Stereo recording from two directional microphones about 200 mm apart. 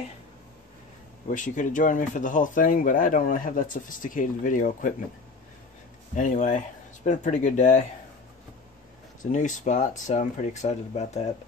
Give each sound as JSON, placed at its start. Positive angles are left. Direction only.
{"t": 1.3, "sound": "speech", "side_deg": 40}
{"t": 6.1, "sound": "speech", "side_deg": 40}
{"t": 9.2, "sound": "speech", "side_deg": 40}